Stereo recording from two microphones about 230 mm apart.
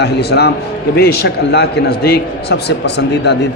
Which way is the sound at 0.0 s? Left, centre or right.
Left.